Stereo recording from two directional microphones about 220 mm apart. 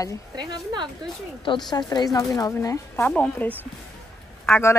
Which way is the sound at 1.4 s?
20° left (ahead or behind).